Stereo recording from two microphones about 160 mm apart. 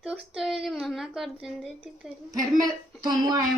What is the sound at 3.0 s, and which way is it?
Speech, 25° right (ahead or behind).